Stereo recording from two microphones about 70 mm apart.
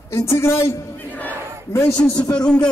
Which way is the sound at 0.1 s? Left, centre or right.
Left.